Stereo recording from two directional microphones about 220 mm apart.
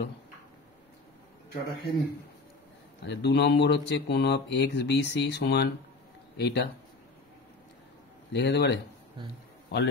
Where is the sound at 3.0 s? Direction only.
50° left (ahead or behind).